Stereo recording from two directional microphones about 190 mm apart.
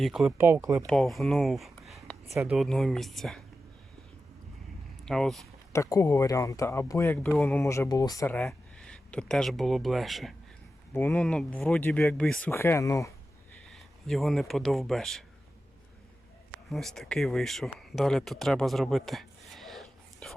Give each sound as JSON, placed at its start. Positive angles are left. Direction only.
{"t": 0.0, "sound": "speech", "side_deg": 0}
{"t": 0.3, "sound": "speech", "side_deg": -15}
{"t": 0.9, "sound": "speech", "side_deg": 0}
{"t": 5.0, "sound": "speech", "side_deg": 0}
{"t": 5.7, "sound": "speech", "side_deg": 15}
{"t": 8.4, "sound": "speech", "side_deg": 5}
{"t": 13.7, "sound": "speech", "side_deg": 0}
{"t": 16.6, "sound": "speech", "side_deg": 0}